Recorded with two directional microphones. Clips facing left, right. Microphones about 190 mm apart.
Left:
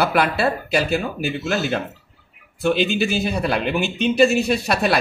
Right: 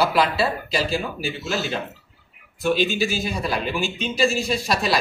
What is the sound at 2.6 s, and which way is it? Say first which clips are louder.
Speech: left 2 dB; 60° left (ahead or behind).